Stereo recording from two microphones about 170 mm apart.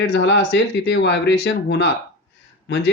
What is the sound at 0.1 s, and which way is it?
Speech, 90° left.